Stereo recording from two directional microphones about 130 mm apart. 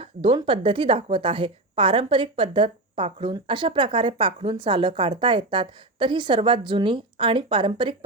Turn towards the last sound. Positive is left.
turn(degrees=-40)  # may be behind; listen again after turning